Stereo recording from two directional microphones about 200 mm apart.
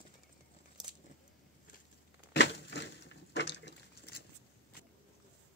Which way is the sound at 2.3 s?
60° left (ahead or behind).